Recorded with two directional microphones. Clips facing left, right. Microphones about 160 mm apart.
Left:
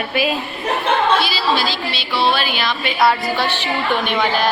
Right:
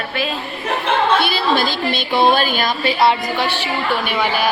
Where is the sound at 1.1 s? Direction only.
55° right (ahead or behind); by 3.2 s 25° right (ahead or behind).